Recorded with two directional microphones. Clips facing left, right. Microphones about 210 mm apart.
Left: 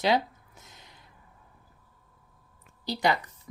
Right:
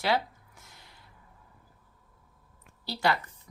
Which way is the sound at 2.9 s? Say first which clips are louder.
Left 2 dB; 15° left (ahead or behind).